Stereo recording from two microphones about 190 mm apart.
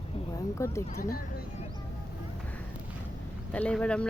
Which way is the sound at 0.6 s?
15° left (ahead or behind).